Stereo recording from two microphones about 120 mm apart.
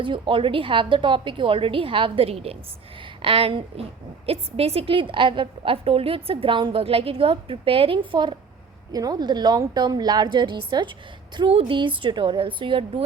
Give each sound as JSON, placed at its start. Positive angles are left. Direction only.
{"t": 0.0, "sound": "a woman's voice", "side_deg": -45}
{"t": 8.9, "sound": "a woman's voice", "side_deg": -30}